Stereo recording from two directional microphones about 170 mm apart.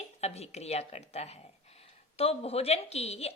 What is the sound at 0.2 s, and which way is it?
A woman's voice, 40° left (ahead or behind).